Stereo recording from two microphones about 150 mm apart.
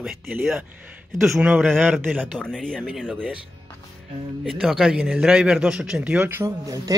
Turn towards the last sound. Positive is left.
turn(degrees=-20)  # may be behind; listen again after turning